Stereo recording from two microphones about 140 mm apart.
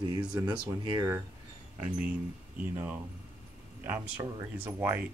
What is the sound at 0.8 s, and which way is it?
Speech, 25° right (ahead or behind).